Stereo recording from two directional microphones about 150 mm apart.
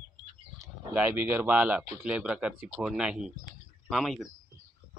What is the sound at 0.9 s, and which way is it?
Speech, 10° right (ahead or behind).